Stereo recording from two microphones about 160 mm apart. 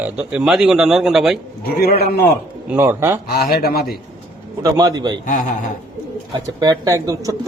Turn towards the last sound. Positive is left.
turn(degrees=-20)  # may be behind; listen again after turning